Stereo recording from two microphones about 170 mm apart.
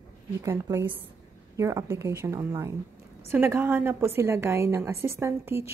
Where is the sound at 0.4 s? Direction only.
15° right (ahead or behind).